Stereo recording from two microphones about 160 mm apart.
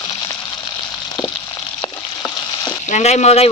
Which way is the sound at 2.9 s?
45° left (ahead or behind).